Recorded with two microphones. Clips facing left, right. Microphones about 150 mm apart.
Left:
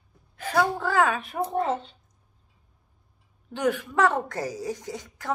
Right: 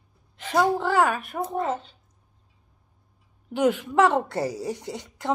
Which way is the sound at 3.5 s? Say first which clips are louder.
Right 4 dB; 15° right (ahead or behind).